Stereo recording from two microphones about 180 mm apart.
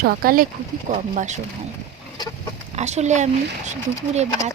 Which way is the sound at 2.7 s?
40° right (ahead or behind).